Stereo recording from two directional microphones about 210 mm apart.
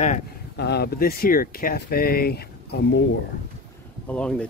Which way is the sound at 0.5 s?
50° left (ahead or behind).